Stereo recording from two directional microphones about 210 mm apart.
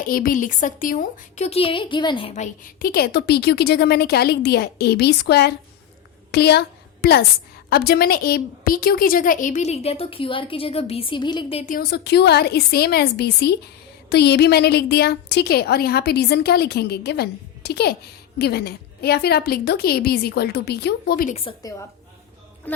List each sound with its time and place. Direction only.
0.0 s a woman's voice: 40° left (ahead or behind); by 11.7 s 25° left (ahead or behind)
11.7 s a woman's voice: 50° left (ahead or behind)
21.2 s a woman's voice: 30° left (ahead or behind)